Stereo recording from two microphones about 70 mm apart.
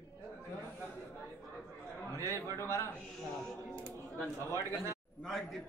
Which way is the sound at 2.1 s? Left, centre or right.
Right.